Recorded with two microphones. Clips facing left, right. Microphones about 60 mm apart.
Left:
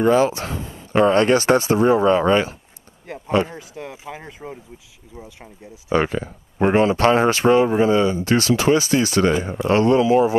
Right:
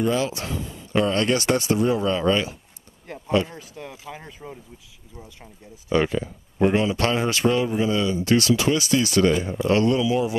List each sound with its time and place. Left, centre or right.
0.0 s speech: left
6.0 s speech: left